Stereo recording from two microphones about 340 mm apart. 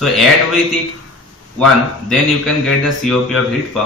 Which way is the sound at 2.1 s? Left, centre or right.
Centre.